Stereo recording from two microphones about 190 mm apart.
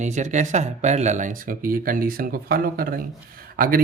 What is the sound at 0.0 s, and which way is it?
Speech, 40° right (ahead or behind).